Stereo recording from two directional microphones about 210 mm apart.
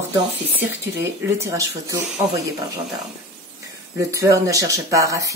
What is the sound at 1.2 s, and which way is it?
Speech, 15° right (ahead or behind).